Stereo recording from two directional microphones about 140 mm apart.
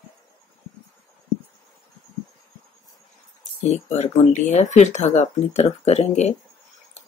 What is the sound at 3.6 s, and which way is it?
Speech, 55° left (ahead or behind).